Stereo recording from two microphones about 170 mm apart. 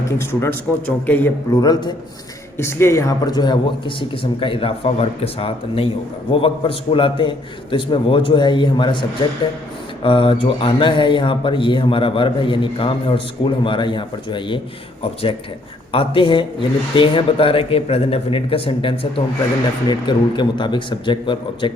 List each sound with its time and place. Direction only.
0.2 s a man's voice: 15° left (ahead or behind)
1.5 s speech: 25° left (ahead or behind)